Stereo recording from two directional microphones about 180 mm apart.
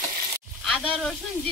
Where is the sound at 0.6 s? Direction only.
5° left (ahead or behind).